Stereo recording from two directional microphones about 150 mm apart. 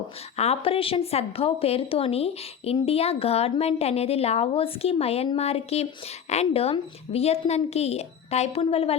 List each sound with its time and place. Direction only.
0.3 s a woman's voice: 45° left (ahead or behind)